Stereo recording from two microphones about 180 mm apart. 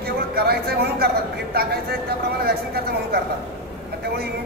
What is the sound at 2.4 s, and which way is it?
Speech, 60° right (ahead or behind).